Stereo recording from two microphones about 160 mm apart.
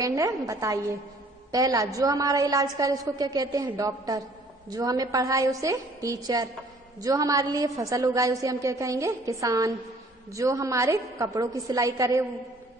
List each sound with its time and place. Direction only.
0.0 s a woman's voice: 20° right (ahead or behind)